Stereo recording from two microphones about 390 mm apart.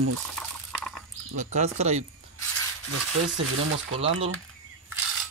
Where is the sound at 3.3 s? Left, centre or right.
Right.